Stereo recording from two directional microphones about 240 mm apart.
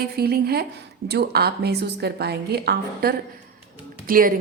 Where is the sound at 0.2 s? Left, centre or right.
Right.